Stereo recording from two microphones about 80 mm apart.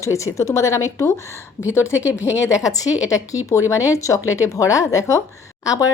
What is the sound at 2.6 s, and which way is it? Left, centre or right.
A woman's voice, left.